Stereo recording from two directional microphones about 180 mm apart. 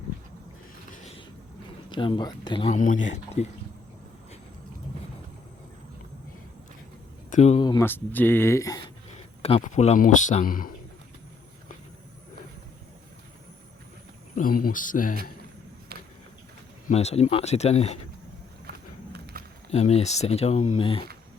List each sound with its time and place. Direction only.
0.9 s a sound: 45° left (ahead or behind)
1.9 s speech: 25° left (ahead or behind)
2.6 s speech: 45° left (ahead or behind)
7.3 s speech: 40° left (ahead or behind)
7.6 s speech: 25° left (ahead or behind)
7.9 s speech: 10° left (ahead or behind)
9.1 s speech: 35° left (ahead or behind)
14.3 s speech: 50° left (ahead or behind)
15.9 s a sound: 60° right (ahead or behind)
16.8 s speech: 35° left (ahead or behind)
19.1 s a sound: 55° right (ahead or behind)
19.7 s speech: 35° left (ahead or behind)